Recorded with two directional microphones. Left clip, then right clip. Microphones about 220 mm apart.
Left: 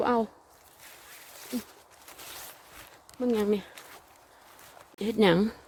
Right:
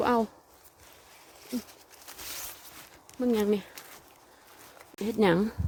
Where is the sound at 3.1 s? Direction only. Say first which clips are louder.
Even; 10° right (ahead or behind).